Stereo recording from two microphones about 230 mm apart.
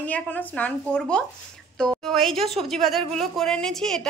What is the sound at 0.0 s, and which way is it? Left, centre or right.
A woman's voice, centre.